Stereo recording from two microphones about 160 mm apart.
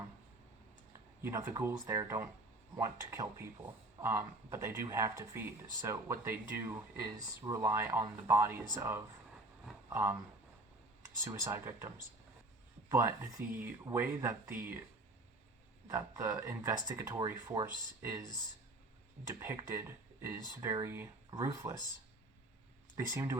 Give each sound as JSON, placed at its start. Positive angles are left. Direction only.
{"t": 1.2, "sound": "speech", "side_deg": -15}
{"t": 11.2, "sound": "speech", "side_deg": -15}
{"t": 12.9, "sound": "speech", "side_deg": -15}
{"t": 15.9, "sound": "speech", "side_deg": -15}
{"t": 19.3, "sound": "speech", "side_deg": -15}
{"t": 23.0, "sound": "speech", "side_deg": -15}